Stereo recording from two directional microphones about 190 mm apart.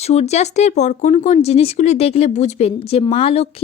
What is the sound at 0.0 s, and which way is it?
Speech, 35° left (ahead or behind).